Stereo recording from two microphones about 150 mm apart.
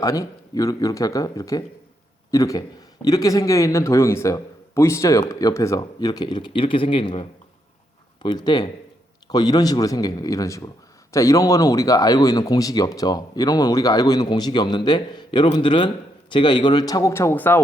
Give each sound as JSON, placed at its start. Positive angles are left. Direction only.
{"t": 0.0, "sound": "a man's voice", "side_deg": 25}